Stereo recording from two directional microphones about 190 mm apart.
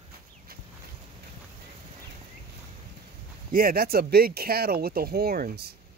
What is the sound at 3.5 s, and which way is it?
Speech, 50° right (ahead or behind).